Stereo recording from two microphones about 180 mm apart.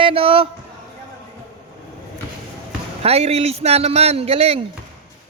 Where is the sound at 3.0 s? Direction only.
35° right (ahead or behind).